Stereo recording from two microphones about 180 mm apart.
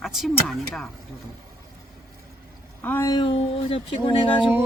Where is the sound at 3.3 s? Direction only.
30° left (ahead or behind).